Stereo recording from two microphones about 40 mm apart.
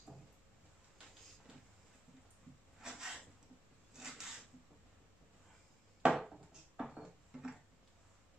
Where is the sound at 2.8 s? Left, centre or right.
Centre.